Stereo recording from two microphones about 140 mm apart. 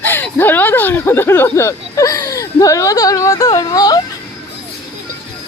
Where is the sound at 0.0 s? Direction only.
15° left (ahead or behind).